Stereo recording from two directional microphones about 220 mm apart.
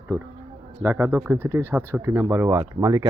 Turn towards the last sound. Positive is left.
turn(degrees=-15)  # may be behind; listen again after turning